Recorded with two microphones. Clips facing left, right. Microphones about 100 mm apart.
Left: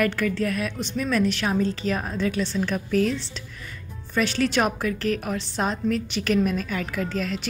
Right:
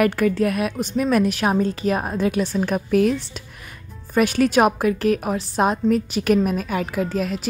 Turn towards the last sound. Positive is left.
turn(degrees=-45)  # may be behind; listen again after turning